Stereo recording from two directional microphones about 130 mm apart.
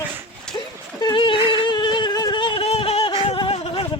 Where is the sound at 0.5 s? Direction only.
30° left (ahead or behind).